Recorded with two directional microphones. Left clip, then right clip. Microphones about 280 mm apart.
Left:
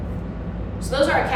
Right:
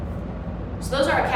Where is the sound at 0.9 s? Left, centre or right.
Centre.